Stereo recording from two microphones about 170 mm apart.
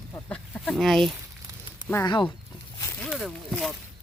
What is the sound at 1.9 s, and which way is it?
Speech, 25° left (ahead or behind).